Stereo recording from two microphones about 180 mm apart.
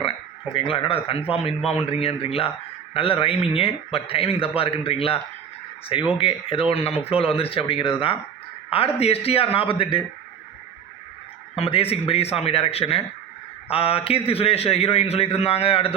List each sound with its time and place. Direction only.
0.5 s a man's voice: 30° left (ahead or behind)
11.5 s a man's voice: 30° left (ahead or behind)